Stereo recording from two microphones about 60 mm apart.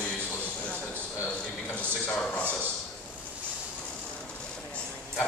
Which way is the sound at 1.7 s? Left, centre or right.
Centre.